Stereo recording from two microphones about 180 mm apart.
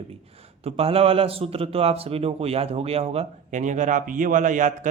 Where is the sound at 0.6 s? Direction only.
35° right (ahead or behind).